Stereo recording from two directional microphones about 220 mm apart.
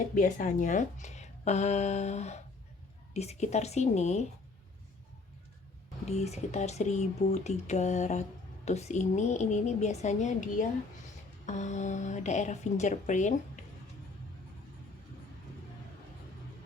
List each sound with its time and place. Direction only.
0.2 s speech: 35° left (ahead or behind)
6.1 s speech: 30° left (ahead or behind)